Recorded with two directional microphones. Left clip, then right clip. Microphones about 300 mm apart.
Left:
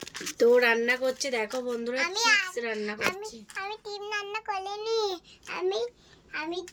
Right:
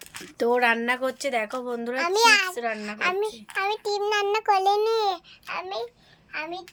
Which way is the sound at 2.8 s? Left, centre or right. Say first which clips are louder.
Right 5 dB; right.